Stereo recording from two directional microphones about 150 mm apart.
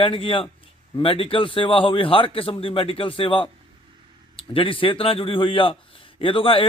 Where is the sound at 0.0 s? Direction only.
35° left (ahead or behind).